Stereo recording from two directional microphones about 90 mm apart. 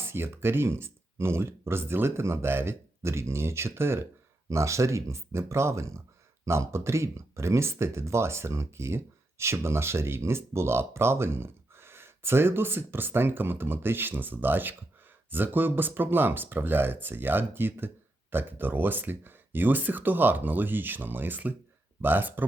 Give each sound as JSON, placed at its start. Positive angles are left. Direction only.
{"t": 0.0, "sound": "speech", "side_deg": -25}